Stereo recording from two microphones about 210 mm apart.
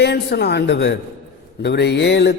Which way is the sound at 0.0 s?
55° left (ahead or behind).